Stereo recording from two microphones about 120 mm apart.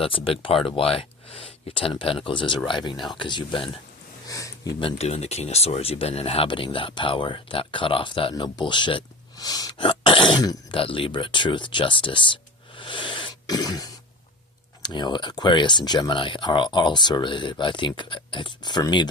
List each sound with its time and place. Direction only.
0.0 s speech: 50° left (ahead or behind)
4.3 s speech: 30° left (ahead or behind)
4.8 s speech: 55° left (ahead or behind)
9.4 s throat clearing: 30° left (ahead or behind)
10.8 s speech: 50° left (ahead or behind)
12.7 s cough: 45° left (ahead or behind)
14.8 s speech: 35° left (ahead or behind)